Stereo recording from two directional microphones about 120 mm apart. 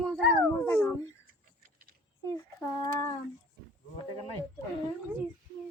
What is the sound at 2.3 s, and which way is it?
Speech, 25° left (ahead or behind).